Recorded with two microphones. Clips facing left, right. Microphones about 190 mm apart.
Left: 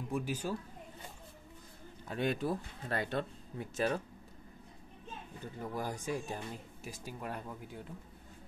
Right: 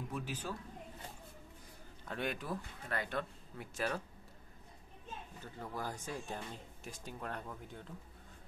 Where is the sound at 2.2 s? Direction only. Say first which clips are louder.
Left 7 dB; 30° left (ahead or behind).